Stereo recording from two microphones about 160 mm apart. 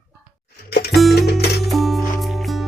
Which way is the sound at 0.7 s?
85° left.